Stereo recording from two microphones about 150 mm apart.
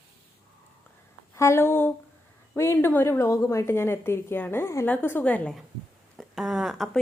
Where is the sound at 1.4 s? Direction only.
15° left (ahead or behind).